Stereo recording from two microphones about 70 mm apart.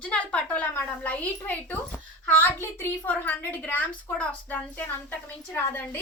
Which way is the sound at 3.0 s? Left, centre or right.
Left.